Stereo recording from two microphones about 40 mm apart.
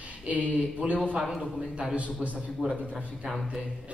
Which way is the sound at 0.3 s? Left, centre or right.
Right.